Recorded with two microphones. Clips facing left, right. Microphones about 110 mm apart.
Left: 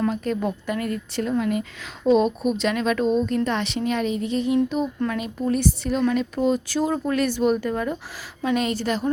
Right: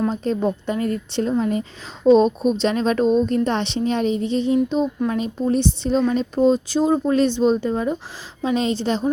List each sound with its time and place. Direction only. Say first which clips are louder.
0.1 s speech: right 3 dB; 30° right (ahead or behind)